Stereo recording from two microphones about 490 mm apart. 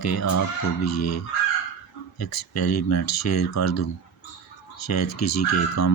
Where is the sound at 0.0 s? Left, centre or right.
Left.